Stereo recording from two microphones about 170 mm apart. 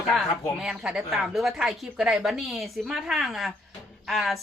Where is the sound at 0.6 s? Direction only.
5° right (ahead or behind).